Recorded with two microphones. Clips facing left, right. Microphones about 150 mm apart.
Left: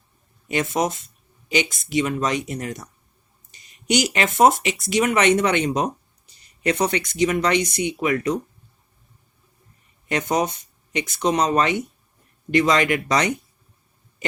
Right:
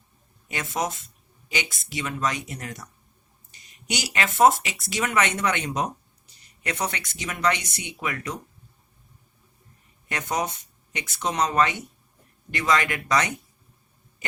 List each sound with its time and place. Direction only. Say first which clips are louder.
0.4 s speech: left 6 dB; 20° left (ahead or behind)
3.9 s speech: left 6 dB; 20° left (ahead or behind)
10.1 s speech: left 6 dB; 20° left (ahead or behind)